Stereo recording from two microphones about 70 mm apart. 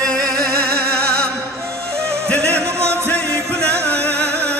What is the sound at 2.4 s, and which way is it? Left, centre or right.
Music, right.